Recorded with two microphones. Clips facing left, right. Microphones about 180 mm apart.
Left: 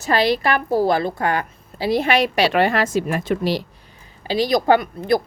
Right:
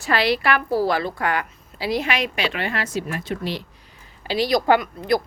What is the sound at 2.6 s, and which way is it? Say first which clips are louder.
A woman's voice: left 8 dB; 50° left (ahead or behind).